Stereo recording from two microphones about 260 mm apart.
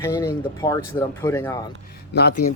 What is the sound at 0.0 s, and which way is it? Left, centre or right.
Speech, centre.